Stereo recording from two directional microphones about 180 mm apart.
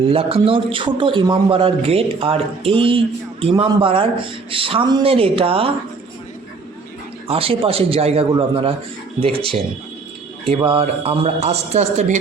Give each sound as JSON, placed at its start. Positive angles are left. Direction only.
{"t": 0.0, "sound": "a man's voice", "side_deg": -30}
{"t": 7.3, "sound": "a man's voice", "side_deg": -30}